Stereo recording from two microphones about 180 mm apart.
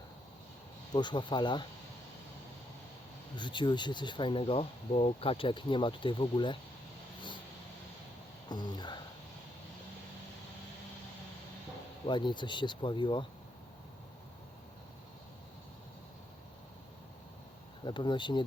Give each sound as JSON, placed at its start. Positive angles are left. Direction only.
{"t": 0.9, "sound": "speech", "side_deg": 25}
{"t": 3.3, "sound": "speech", "side_deg": 25}
{"t": 8.4, "sound": "speech", "side_deg": 25}
{"t": 12.0, "sound": "speech", "side_deg": 25}
{"t": 17.8, "sound": "speech", "side_deg": 25}